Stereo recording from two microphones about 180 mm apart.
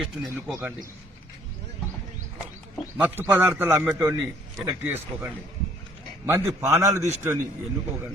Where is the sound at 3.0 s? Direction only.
10° right (ahead or behind).